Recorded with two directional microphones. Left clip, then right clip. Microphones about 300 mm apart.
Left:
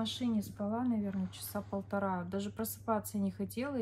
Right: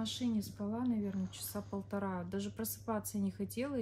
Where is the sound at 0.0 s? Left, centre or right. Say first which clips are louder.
Left 2 dB; centre.